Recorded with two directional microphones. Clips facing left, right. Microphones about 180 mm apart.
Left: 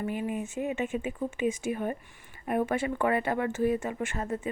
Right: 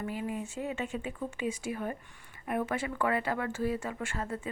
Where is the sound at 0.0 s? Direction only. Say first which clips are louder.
Left 4 dB; 20° left (ahead or behind).